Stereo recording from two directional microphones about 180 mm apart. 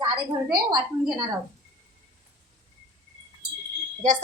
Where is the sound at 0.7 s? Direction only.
25° right (ahead or behind).